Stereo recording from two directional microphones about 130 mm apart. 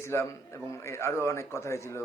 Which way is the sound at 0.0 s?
20° left (ahead or behind).